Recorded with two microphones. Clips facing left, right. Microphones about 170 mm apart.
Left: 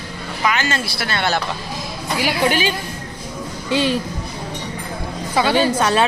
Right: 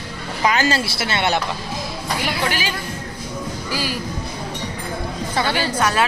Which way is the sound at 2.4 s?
20° left (ahead or behind).